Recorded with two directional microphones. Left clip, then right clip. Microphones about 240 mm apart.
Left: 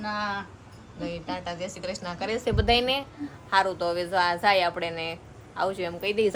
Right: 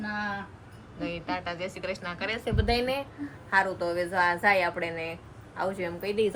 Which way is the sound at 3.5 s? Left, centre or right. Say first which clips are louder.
Left 2 dB; centre.